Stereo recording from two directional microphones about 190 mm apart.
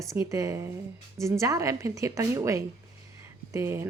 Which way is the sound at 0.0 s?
15° right (ahead or behind).